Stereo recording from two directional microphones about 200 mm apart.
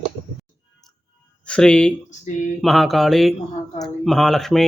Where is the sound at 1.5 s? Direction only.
5° left (ahead or behind).